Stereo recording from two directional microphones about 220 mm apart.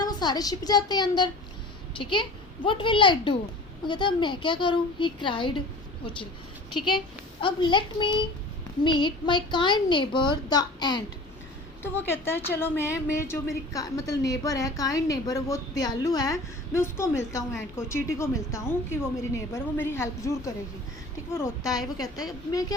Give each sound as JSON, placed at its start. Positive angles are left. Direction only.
{"t": 0.0, "sound": "a woman's voice", "side_deg": 20}
{"t": 6.7, "sound": "a woman's voice", "side_deg": 20}